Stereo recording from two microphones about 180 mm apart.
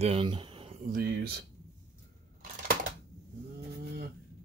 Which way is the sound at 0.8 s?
55° right (ahead or behind).